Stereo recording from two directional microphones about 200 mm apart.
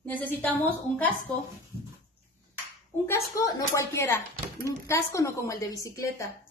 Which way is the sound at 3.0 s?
15° left (ahead or behind).